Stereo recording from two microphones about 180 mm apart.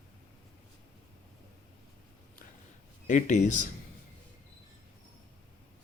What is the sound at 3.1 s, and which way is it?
Speech, 45° left (ahead or behind).